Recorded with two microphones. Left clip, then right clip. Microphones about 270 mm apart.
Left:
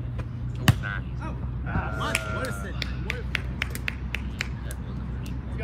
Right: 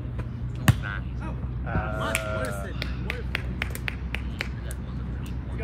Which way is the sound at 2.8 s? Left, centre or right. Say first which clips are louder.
Left 1 dB; right.